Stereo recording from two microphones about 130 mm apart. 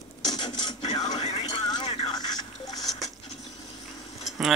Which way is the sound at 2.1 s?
30° left (ahead or behind).